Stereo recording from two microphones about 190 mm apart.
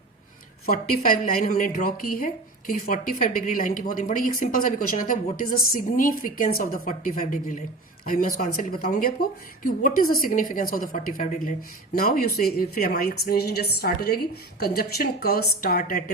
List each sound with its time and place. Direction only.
0.6 s a woman's voice: 45° left (ahead or behind)